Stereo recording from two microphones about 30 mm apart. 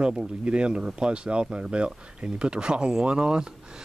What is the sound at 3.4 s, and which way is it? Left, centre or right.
Speech, right.